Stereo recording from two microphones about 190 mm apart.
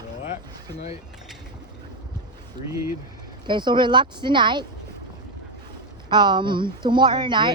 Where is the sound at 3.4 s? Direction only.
25° right (ahead or behind).